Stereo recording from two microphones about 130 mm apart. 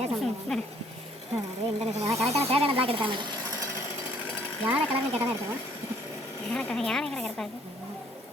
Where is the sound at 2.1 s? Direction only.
50° right (ahead or behind).